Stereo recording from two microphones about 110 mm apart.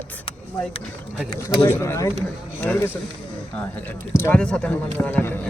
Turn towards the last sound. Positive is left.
turn(degrees=15)  # may be behind; listen again after turning